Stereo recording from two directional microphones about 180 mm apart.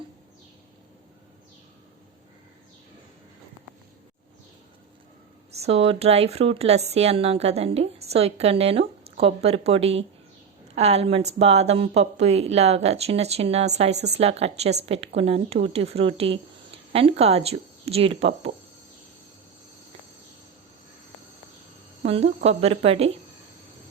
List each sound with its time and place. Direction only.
5.5 s a woman's voice: 35° right (ahead or behind)
22.0 s speech: 35° right (ahead or behind)